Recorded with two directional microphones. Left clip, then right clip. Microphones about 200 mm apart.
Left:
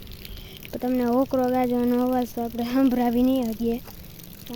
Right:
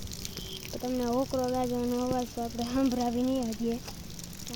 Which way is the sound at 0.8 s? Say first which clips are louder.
Left 7 dB; 50° left (ahead or behind).